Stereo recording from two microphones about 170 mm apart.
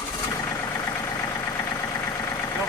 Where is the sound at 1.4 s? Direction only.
15° left (ahead or behind).